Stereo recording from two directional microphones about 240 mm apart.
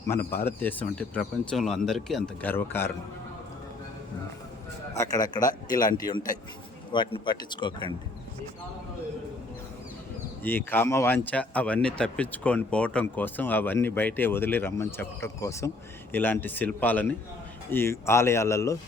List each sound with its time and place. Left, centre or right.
0.1 s speech: centre
4.9 s speech: centre
10.4 s speech: centre